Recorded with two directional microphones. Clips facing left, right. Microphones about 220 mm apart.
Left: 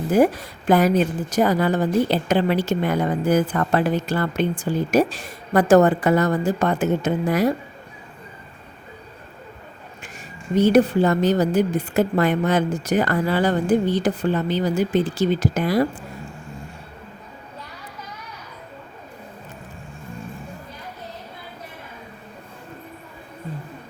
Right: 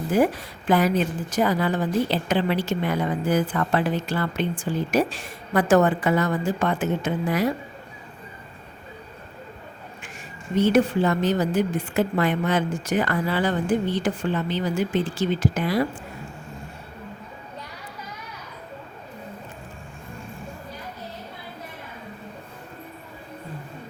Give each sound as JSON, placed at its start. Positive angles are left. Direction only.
{"t": 0.1, "sound": "a woman's voice", "side_deg": 45}
{"t": 10.5, "sound": "a woman's voice", "side_deg": 40}